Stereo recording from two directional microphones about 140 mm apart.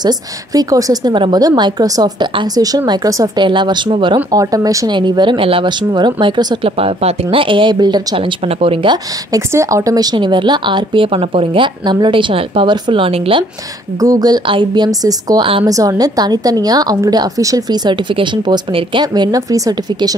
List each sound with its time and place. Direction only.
0.0 s a woman's voice: 25° right (ahead or behind)
8.5 s speech: 45° right (ahead or behind)
9.5 s speech: 20° right (ahead or behind); by 13.5 s 40° right (ahead or behind)
14.0 s a woman's voice: 25° right (ahead or behind)